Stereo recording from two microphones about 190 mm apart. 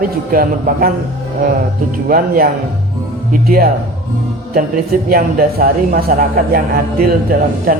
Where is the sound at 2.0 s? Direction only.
50° right (ahead or behind).